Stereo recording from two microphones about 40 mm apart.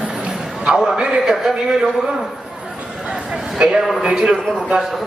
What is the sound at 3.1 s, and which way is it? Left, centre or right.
Speech, right.